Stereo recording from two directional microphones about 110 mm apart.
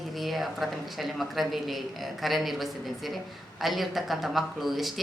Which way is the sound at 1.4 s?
Centre (ahead or behind).